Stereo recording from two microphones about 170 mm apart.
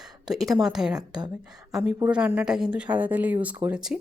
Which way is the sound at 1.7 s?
5° right (ahead or behind).